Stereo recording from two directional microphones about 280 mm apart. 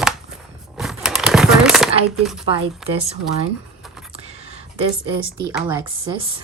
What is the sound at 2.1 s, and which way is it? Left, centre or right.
Speech, centre.